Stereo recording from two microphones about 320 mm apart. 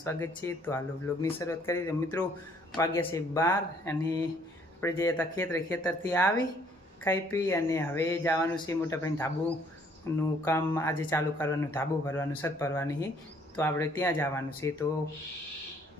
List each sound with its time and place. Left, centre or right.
0.0 s speech: centre